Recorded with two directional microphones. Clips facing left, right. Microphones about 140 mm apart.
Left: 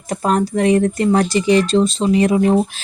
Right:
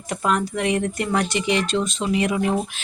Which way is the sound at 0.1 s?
35° left (ahead or behind).